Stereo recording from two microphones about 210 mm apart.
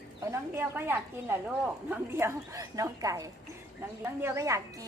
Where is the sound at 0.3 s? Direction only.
10° right (ahead or behind).